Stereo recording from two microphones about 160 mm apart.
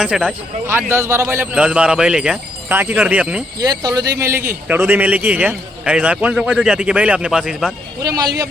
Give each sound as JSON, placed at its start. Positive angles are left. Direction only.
{"t": 0.0, "sound": "a man's voice", "side_deg": -5}
{"t": 1.6, "sound": "a man's voice", "side_deg": -5}
{"t": 3.6, "sound": "a man's voice", "side_deg": -25}
{"t": 8.0, "sound": "a man's voice", "side_deg": -25}